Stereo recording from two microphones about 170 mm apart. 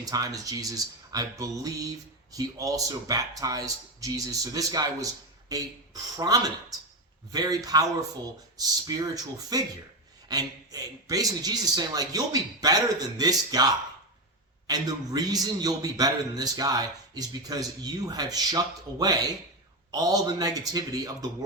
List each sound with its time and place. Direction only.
0.0 s a man's voice: 20° right (ahead or behind)